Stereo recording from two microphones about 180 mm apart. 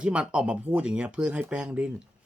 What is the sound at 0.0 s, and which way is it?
Speech, 5° right (ahead or behind).